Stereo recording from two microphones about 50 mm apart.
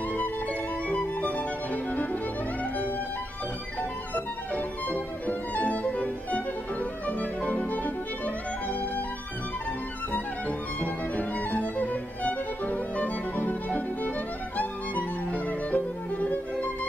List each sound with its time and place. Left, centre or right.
0.2 s music: left
4.1 s music: left
10.8 s violin: left
14.6 s music: left